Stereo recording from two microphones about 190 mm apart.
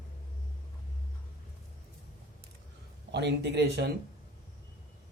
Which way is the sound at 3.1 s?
65° right (ahead or behind).